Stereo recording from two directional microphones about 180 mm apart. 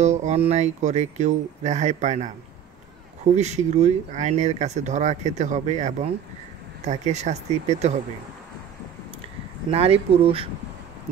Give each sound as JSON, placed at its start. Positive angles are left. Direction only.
{"t": 0.0, "sound": "speech", "side_deg": -40}
{"t": 3.3, "sound": "speech", "side_deg": -40}
{"t": 9.7, "sound": "speech", "side_deg": -30}